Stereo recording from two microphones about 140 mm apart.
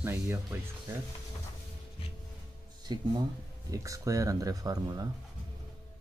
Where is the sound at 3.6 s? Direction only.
25° right (ahead or behind).